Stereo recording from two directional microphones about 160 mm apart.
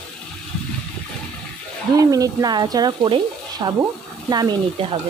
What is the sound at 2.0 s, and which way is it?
Speech, 20° right (ahead or behind).